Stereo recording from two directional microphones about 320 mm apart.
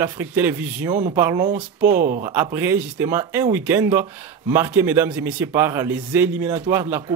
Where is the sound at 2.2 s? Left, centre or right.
Centre.